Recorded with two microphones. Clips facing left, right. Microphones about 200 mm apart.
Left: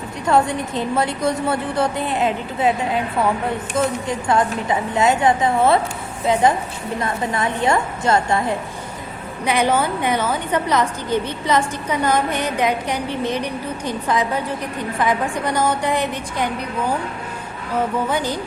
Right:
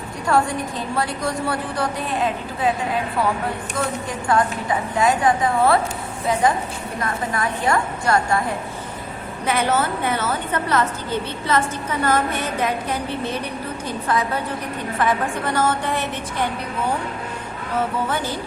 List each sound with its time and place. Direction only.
0.3 s a woman's voice: 20° left (ahead or behind)
3.8 s a woman's voice: 25° left (ahead or behind)
7.0 s a woman's voice: 25° left (ahead or behind)
18.1 s a woman's voice: 15° left (ahead or behind)